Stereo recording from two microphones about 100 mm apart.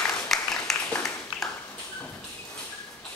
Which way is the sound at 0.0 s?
5° left (ahead or behind).